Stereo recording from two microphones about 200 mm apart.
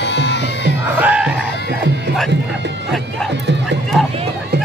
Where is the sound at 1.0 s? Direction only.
5° right (ahead or behind).